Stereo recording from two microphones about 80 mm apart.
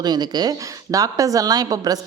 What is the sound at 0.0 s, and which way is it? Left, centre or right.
A woman's voice, right.